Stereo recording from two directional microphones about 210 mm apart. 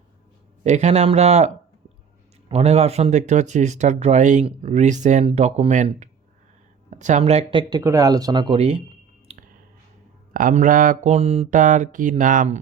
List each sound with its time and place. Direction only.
0.6 s speech: 35° right (ahead or behind)
2.5 s speech: 30° right (ahead or behind)
7.7 s speech: 15° right (ahead or behind)
9.3 s a sound: 30° right (ahead or behind)
10.3 s speech: 40° right (ahead or behind)